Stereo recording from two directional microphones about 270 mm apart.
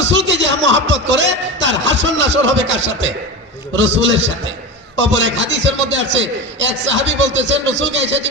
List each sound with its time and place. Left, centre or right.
0.1 s music: right
3.8 s a man's voice: right